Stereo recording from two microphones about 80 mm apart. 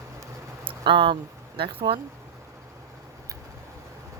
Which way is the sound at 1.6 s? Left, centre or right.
Right.